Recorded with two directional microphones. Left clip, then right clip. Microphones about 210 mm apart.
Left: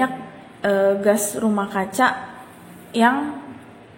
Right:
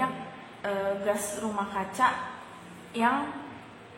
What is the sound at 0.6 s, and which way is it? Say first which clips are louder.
A woman's voice: left 12 dB; 30° left (ahead or behind).